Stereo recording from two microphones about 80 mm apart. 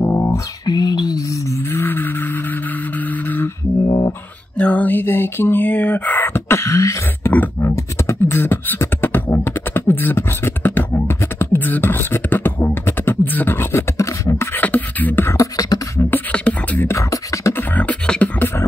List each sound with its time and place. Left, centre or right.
0.0 s a sound: left
0.7 s a sound: left
3.8 s beatboxing: left
4.6 s a sound: centre; by 7.0 s left
7.2 s beatboxing: left
14.5 s beatboxing: left
15.2 s beatboxing: left
16.3 s beatboxing: centre
16.8 s beatboxing: left
17.6 s beatboxing: centre
18.4 s beatboxing: left